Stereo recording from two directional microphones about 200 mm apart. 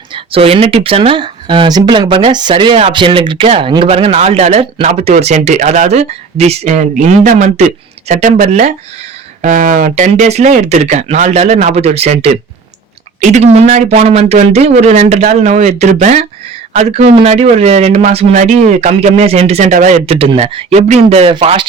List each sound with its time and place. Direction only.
0.1 s speech: 30° right (ahead or behind)